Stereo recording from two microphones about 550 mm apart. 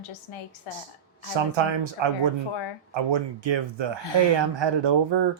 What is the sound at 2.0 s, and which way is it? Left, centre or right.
Speech, right.